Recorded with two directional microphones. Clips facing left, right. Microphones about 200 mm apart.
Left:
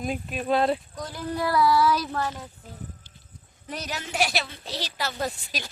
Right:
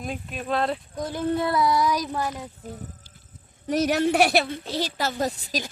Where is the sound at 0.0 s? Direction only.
5° left (ahead or behind).